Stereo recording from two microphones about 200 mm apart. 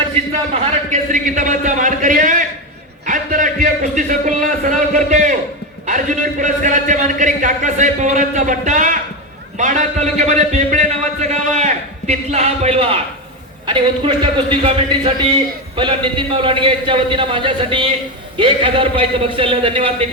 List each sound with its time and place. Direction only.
0.5 s a man's voice: 40° right (ahead or behind)
6.4 s a man's voice: 40° right (ahead or behind)